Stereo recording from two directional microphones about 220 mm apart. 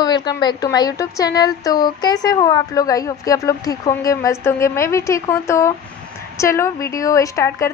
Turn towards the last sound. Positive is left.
turn(degrees=15)  # may be behind; listen again after turning